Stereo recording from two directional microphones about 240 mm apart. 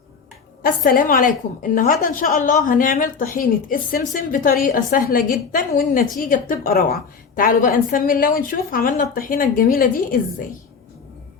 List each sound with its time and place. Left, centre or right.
0.6 s a woman's voice: left